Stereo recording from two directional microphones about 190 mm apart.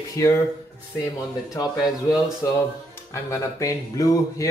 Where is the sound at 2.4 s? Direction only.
15° left (ahead or behind).